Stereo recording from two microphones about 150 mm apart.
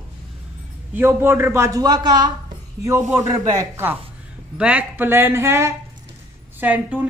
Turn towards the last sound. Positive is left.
turn(degrees=-10)  # may be behind; listen again after turning